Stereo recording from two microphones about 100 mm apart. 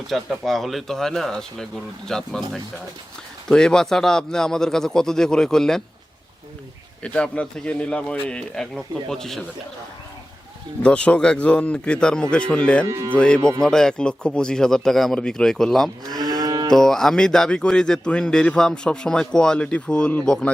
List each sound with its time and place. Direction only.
0.1 s speech: centre (ahead or behind)
7.0 s speech: 10° left (ahead or behind)
10.8 s speech: 10° left (ahead or behind)
16.4 s moo: 35° right (ahead or behind)
16.6 s speech: 5° left (ahead or behind)